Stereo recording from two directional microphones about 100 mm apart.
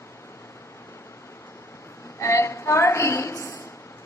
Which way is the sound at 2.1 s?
30° left (ahead or behind).